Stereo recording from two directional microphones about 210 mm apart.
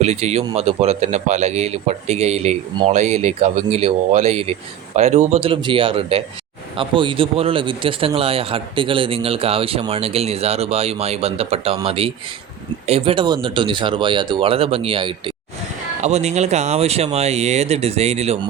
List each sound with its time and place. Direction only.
0.0 s a man's voice: 30° right (ahead or behind)